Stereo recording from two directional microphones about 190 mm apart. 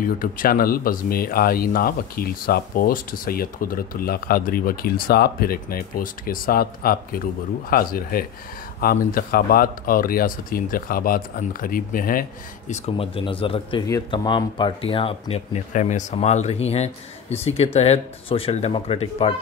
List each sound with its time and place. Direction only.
0.0 s speech: 45° left (ahead or behind)